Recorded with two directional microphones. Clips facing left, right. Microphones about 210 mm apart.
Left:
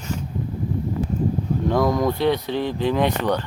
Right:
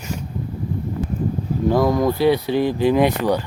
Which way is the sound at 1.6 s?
5° right (ahead or behind).